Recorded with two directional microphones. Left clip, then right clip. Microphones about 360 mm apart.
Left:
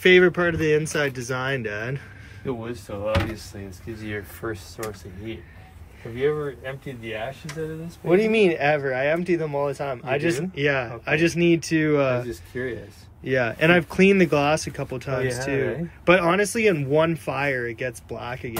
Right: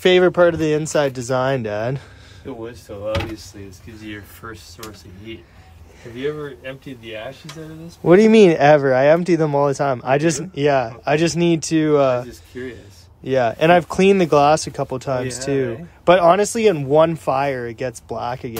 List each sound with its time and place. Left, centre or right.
0.0 s speech: centre
8.1 s speech: right